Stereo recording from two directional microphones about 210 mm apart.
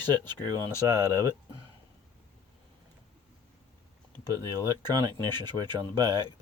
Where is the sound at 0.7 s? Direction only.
15° left (ahead or behind).